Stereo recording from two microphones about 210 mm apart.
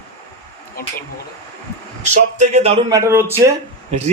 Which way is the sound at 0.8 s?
45° left (ahead or behind).